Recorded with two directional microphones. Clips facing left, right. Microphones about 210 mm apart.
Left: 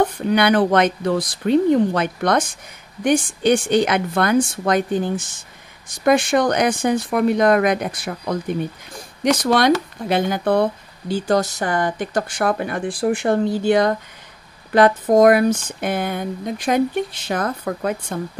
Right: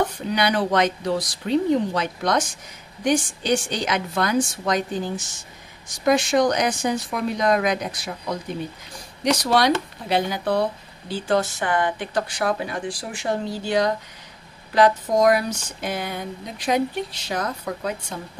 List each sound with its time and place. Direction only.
0.3 s speech: 55° left (ahead or behind)